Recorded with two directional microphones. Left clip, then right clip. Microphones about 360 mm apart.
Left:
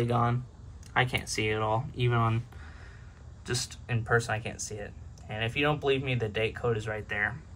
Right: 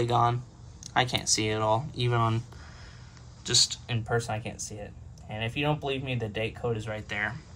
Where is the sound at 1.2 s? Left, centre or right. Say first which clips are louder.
Right 2 dB; centre.